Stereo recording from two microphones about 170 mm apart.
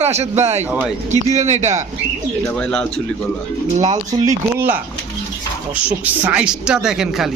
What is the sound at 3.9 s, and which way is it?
Speech, 20° right (ahead or behind).